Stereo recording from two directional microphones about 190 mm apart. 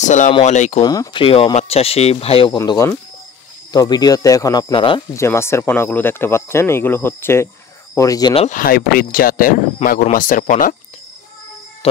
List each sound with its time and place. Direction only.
0.0 s speech: 40° left (ahead or behind)
0.8 s speech: 25° left (ahead or behind)
2.5 s speech: 20° left (ahead or behind)
5.1 s speech: 15° left (ahead or behind)
8.5 s speech: 50° left (ahead or behind)
11.8 s music: 30° left (ahead or behind)